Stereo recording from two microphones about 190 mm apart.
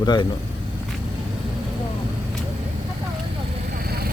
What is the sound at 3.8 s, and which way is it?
Vehicle, 55° right (ahead or behind).